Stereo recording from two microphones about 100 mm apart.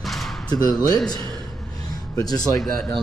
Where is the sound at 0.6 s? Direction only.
40° left (ahead or behind).